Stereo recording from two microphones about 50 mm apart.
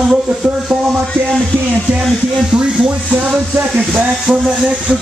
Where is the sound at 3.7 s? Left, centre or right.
Centre.